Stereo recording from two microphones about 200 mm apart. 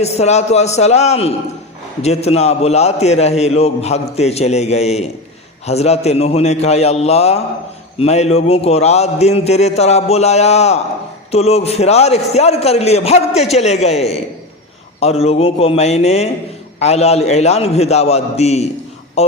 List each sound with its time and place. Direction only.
0.0 s a man's voice: 35° left (ahead or behind)